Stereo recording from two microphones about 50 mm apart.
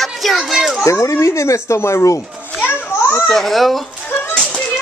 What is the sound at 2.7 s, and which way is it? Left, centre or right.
Children playing, left.